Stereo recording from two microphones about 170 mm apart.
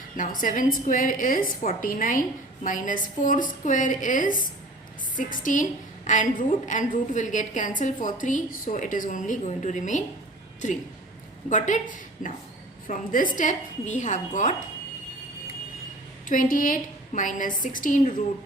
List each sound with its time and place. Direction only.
0.2 s a woman's voice: 50° left (ahead or behind)
16.3 s a woman's voice: 50° left (ahead or behind)